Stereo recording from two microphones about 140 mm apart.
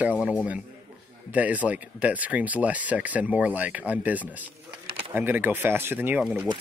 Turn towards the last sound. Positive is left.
turn(degrees=-10)  # may be behind; listen again after turning